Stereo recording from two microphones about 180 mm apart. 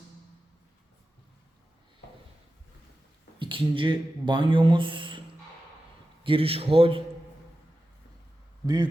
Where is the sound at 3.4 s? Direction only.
30° right (ahead or behind).